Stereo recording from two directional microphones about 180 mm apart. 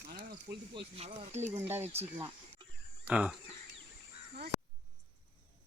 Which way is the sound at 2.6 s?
30° right (ahead or behind).